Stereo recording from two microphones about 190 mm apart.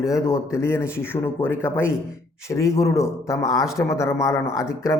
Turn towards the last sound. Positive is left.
turn(degrees=15)  # may be behind; listen again after turning